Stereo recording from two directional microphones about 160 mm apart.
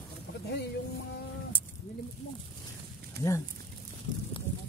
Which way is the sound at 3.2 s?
85° right.